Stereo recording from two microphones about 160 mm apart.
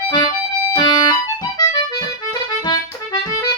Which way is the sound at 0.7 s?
25° left (ahead or behind).